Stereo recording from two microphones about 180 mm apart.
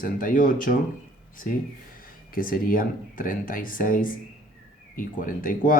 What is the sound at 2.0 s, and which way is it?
Speech, 50° left (ahead or behind).